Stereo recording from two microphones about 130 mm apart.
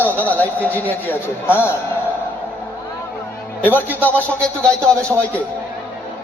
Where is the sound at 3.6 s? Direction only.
15° left (ahead or behind).